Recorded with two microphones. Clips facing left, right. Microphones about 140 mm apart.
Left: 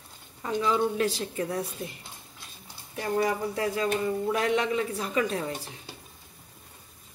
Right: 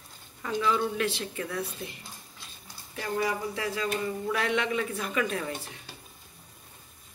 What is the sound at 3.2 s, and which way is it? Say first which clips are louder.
A woman's voice: left 3 dB; 45° left (ahead or behind).